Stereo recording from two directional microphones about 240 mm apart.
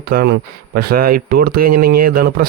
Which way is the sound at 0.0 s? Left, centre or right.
Right.